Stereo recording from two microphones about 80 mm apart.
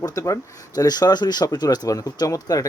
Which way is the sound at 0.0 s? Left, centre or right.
Left.